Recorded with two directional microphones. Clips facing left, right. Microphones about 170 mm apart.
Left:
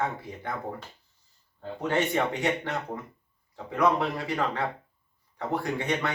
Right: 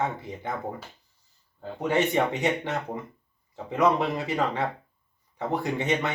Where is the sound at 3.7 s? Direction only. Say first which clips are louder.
Right 2 dB; 20° right (ahead or behind).